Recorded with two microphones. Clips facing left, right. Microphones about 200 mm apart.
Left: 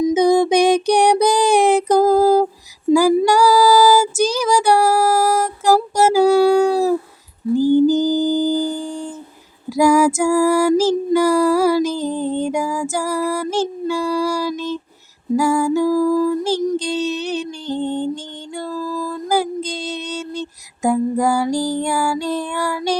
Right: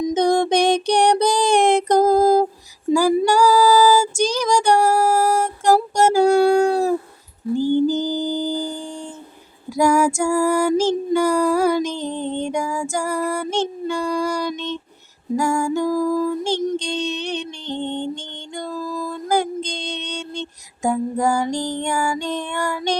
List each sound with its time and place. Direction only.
0.0 s music: 5° left (ahead or behind)
2.9 s female singing: 5° left (ahead or behind)
7.5 s humming: 10° left (ahead or behind)
9.6 s female singing: 5° left (ahead or behind)
16.2 s music: 5° left (ahead or behind)
18.7 s a sound: 15° right (ahead or behind)
19.1 s female singing: 5° left (ahead or behind)